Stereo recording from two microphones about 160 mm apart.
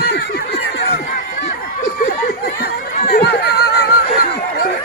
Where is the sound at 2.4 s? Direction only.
85° left.